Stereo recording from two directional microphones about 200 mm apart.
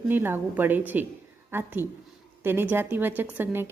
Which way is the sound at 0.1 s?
10° right (ahead or behind).